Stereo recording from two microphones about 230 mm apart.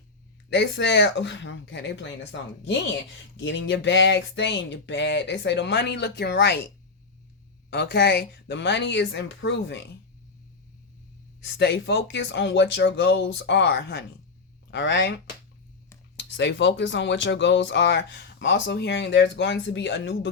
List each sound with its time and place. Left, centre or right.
0.5 s speech: left
3.4 s speech: left
7.7 s speech: left
11.3 s speech: left
16.1 s speech: left